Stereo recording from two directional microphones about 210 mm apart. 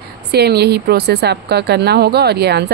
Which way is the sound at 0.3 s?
50° right (ahead or behind).